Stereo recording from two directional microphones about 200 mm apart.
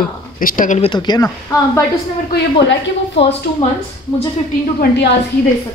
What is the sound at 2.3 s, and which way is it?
Speech, 60° left (ahead or behind).